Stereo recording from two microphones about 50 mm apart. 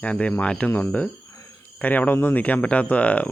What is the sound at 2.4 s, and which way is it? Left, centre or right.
Speech, left.